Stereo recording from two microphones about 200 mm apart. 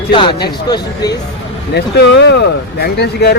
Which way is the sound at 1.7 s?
60° left (ahead or behind).